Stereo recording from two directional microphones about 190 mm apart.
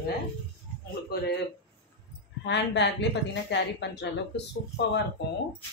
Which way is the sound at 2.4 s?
65° left (ahead or behind).